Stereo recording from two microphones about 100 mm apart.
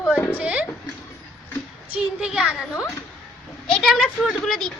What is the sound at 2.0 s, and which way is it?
Speech, 10° right (ahead or behind).